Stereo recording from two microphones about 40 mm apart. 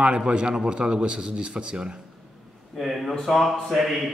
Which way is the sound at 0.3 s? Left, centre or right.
Right.